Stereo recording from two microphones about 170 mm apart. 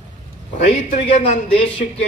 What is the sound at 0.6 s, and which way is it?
Speech, 40° left (ahead or behind).